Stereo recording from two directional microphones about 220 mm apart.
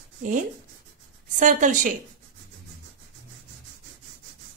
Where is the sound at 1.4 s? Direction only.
35° right (ahead or behind).